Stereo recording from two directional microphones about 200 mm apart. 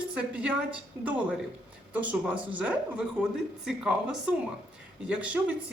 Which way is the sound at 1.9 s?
5° right (ahead or behind).